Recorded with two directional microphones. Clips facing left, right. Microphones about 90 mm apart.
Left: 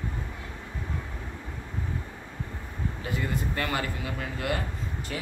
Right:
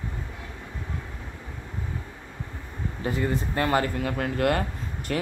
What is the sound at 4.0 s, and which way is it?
Speech, 55° right (ahead or behind).